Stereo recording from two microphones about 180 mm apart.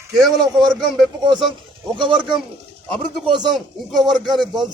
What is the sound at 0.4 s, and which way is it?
Speech, 25° right (ahead or behind).